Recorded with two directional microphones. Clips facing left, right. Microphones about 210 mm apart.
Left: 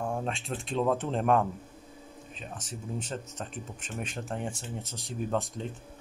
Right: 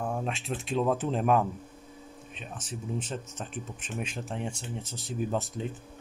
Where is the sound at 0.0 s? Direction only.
5° right (ahead or behind).